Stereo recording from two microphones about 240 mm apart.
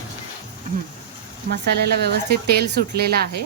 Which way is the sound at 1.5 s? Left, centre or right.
Right.